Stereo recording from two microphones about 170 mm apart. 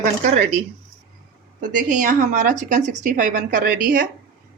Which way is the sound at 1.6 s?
50° right (ahead or behind).